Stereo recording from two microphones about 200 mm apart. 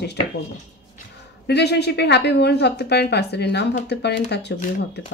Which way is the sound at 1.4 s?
55° left (ahead or behind).